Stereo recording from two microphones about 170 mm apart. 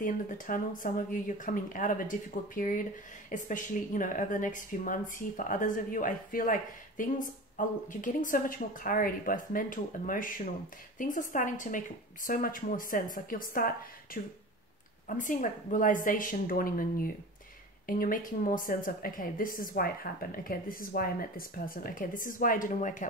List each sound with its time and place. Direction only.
0.0 s a woman's voice: 50° left (ahead or behind)
17.8 s a woman's voice: 55° left (ahead or behind)